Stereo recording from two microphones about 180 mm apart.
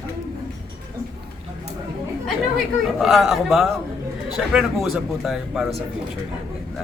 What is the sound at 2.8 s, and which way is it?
A man's voice, centre (ahead or behind).